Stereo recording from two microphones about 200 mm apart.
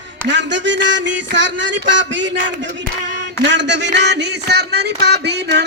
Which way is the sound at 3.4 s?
60° right (ahead or behind).